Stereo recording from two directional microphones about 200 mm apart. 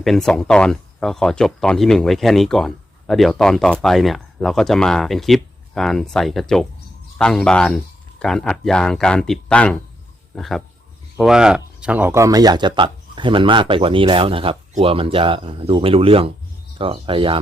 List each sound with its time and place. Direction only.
0.0 s speech: centre (ahead or behind); by 17.4 s 25° right (ahead or behind)